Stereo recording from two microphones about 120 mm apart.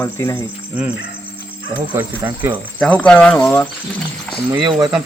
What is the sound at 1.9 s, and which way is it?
Speech, 15° right (ahead or behind).